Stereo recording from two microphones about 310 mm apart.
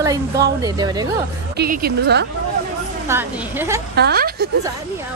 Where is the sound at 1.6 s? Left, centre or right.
Right.